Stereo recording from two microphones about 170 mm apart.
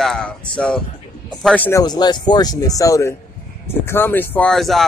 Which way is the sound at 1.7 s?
20° left (ahead or behind).